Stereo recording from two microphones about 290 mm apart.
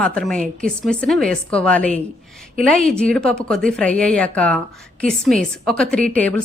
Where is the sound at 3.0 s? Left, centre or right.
Centre.